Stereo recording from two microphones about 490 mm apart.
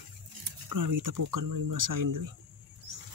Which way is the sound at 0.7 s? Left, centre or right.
Right.